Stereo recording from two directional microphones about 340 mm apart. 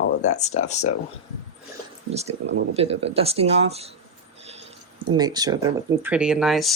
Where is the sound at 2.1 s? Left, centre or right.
Centre.